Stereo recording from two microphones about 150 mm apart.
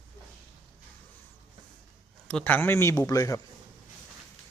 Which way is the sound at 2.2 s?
10° left (ahead or behind).